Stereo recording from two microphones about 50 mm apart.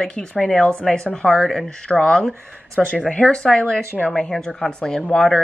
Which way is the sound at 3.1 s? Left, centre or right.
Centre.